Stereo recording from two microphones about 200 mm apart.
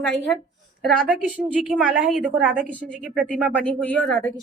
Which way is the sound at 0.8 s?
5° right (ahead or behind).